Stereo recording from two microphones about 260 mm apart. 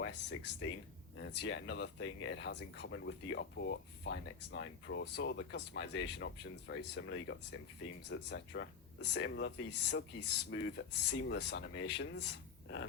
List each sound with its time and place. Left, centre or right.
0.0 s speech: left
1.4 s speech: left